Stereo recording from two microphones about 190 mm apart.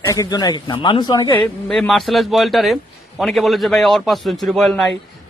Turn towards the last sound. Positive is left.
turn(degrees=0)  # may be behind; listen again after turning